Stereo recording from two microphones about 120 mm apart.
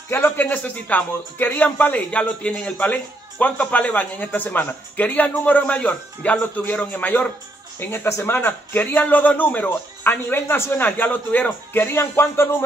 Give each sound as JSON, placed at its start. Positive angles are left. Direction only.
{"t": 0.1, "sound": "speech", "side_deg": 15}